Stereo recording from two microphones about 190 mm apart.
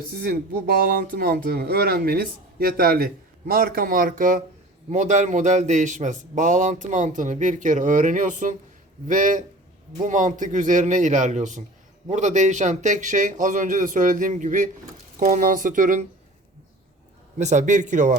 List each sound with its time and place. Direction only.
0.1 s a man's voice: 55° right (ahead or behind)
17.3 s a man's voice: 40° right (ahead or behind)